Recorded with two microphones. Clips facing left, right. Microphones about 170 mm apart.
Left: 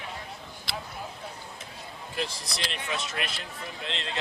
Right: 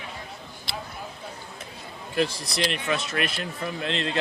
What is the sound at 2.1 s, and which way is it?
Speech, 65° right (ahead or behind).